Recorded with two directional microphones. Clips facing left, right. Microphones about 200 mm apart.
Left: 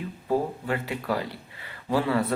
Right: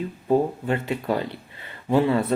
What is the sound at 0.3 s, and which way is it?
Speech, 25° right (ahead or behind).